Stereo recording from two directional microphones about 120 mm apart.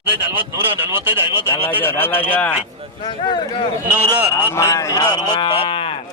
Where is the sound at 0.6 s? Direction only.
15° right (ahead or behind).